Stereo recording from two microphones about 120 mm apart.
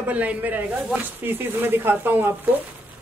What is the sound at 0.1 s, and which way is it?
Speech, 10° right (ahead or behind).